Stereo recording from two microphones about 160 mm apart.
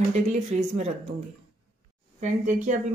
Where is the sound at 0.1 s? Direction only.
45° right (ahead or behind).